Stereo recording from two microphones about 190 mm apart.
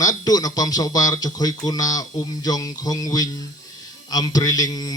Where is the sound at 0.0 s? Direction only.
20° left (ahead or behind).